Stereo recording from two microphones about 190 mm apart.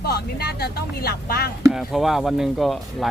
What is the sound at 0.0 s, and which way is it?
Speech, 55° left (ahead or behind).